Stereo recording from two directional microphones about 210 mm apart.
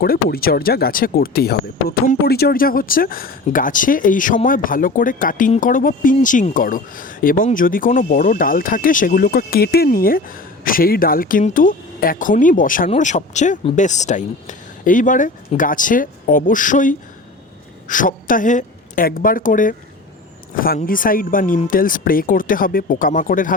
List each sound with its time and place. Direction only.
0.0 s a woman's voice: 45° left (ahead or behind)